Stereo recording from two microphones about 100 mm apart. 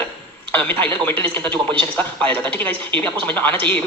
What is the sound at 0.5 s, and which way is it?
A man's voice, 20° left (ahead or behind).